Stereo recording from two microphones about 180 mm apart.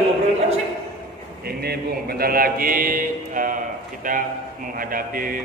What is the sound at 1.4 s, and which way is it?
A man's voice, 60° right (ahead or behind).